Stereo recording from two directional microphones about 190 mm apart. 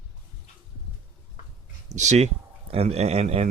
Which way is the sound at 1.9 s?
40° right (ahead or behind).